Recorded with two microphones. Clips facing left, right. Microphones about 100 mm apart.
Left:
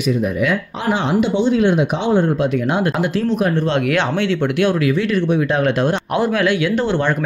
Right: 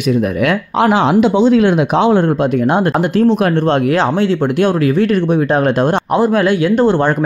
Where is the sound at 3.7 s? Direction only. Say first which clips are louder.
Right 5 dB; 35° right (ahead or behind).